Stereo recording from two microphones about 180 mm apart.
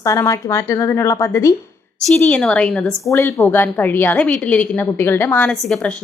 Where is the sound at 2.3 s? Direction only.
5° left (ahead or behind).